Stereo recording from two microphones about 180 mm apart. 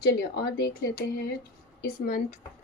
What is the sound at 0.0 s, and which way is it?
A woman's voice, 60° left (ahead or behind).